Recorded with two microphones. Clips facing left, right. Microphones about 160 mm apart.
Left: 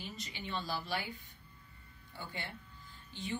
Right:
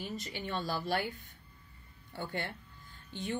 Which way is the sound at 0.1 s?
50° right (ahead or behind).